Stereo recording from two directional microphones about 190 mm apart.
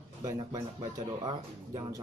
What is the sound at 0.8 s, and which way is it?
Speech, 20° right (ahead or behind).